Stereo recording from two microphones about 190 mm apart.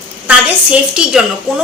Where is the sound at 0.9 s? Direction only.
5° right (ahead or behind).